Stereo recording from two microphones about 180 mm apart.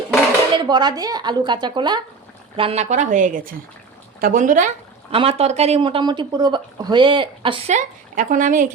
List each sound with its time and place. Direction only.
0.5 s a woman's voice: 25° right (ahead or behind); by 4.7 s 45° right (ahead or behind)
5.1 s speech: 35° right (ahead or behind)
7.7 s speech: 45° right (ahead or behind)